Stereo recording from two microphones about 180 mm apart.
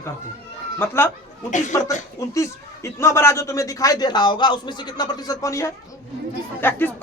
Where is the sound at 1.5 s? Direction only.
45° left (ahead or behind).